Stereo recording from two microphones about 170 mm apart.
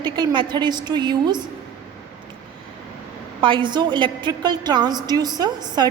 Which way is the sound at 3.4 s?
30° right (ahead or behind).